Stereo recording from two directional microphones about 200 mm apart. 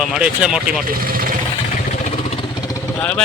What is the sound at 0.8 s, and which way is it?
Speech, 45° right (ahead or behind).